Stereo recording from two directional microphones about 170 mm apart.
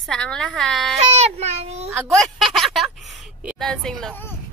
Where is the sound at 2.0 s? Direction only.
Centre (ahead or behind).